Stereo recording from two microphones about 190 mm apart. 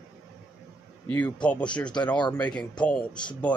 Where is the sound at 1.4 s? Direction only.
5° left (ahead or behind).